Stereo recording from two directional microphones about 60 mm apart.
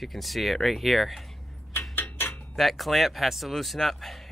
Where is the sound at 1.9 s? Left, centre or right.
Left.